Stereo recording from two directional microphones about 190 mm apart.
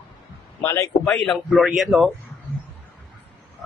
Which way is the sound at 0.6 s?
15° left (ahead or behind).